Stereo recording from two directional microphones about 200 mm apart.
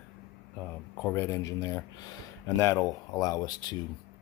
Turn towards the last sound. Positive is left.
turn(degrees=20)  # may be behind; listen again after turning